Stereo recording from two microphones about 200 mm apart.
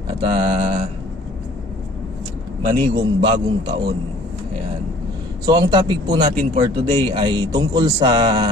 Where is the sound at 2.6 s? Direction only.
25° right (ahead or behind).